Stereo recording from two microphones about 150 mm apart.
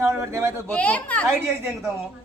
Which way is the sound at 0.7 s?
10° left (ahead or behind).